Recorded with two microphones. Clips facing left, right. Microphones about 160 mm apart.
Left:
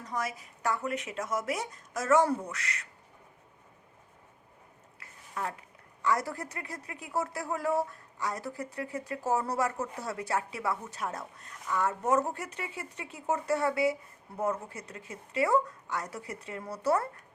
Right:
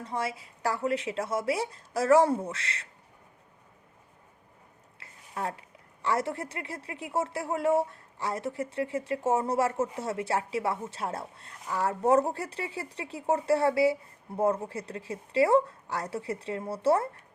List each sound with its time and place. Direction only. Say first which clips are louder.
0.0 s speech: right 2 dB; 30° right (ahead or behind)
4.9 s a sound: right 2 dB; 30° right (ahead or behind)
6.0 s speech: right 1 dB; 25° right (ahead or behind)